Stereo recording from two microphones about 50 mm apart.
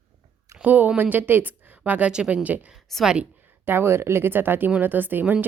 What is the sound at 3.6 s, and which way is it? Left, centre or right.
A woman's voice, right.